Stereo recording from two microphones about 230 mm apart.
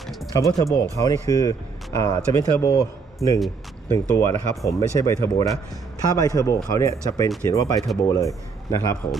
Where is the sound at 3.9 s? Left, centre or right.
Centre.